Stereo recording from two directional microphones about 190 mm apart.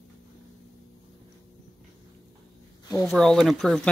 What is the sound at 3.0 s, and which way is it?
Speech, 5° left (ahead or behind).